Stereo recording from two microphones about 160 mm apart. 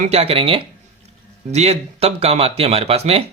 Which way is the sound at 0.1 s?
40° right (ahead or behind).